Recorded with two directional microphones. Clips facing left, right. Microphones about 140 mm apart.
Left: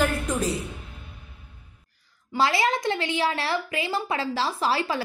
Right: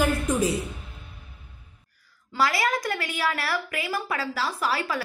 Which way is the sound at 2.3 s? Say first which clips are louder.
Left 2 dB; 25° left (ahead or behind).